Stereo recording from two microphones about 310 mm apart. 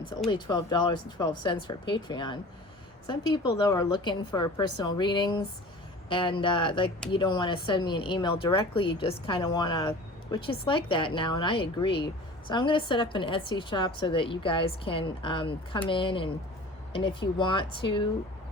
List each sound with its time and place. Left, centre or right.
0.1 s a woman's voice: centre